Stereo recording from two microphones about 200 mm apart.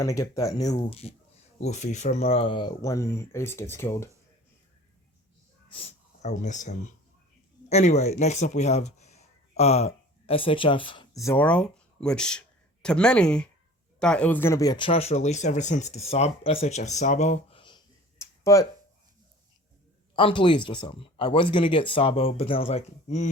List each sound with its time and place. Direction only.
0.0 s speech: 15° left (ahead or behind)
0.7 s speech: 30° left (ahead or behind); by 4.1 s 15° left (ahead or behind)
5.6 s speech: 30° left (ahead or behind)
20.1 s speech: 25° left (ahead or behind)